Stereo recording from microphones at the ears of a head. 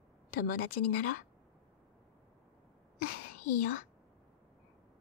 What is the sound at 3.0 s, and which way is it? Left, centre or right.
Whispering, left.